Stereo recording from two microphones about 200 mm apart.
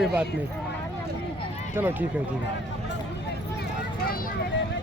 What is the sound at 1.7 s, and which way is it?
Speech, 10° right (ahead or behind).